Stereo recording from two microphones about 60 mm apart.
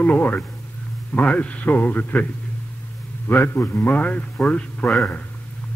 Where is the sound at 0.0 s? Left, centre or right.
Left.